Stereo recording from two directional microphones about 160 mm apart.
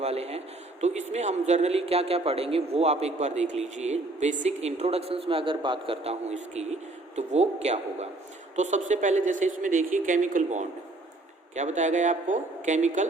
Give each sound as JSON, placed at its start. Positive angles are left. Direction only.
{"t": 0.0, "sound": "a man's voice", "side_deg": -40}